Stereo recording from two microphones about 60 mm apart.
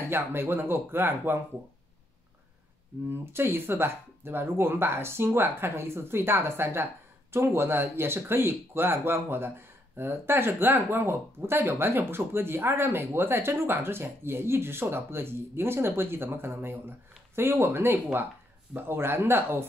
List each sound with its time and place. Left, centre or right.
0.1 s speech: right
3.1 s speech: right